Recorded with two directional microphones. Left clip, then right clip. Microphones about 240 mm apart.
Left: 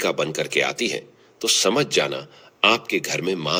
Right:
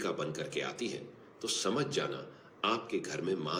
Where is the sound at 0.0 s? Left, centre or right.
Left.